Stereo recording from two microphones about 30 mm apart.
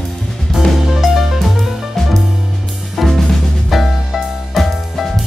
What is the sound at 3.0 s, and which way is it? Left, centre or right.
Drum kit, centre.